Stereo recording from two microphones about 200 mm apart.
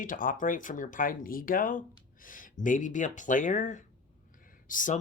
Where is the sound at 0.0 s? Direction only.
45° left (ahead or behind).